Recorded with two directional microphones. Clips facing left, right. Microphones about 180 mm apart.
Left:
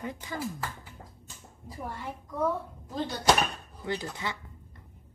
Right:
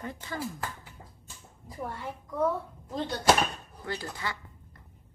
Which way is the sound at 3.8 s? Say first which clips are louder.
Left 2 dB; 20° left (ahead or behind).